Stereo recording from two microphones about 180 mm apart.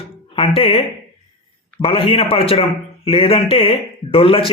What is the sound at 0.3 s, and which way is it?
A man's voice, 30° left (ahead or behind).